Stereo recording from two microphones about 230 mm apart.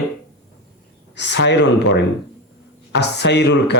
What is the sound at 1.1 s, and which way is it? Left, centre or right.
Speech, left.